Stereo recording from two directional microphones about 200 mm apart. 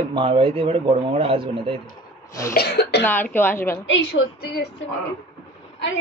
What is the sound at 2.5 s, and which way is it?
Speech, 55° left (ahead or behind).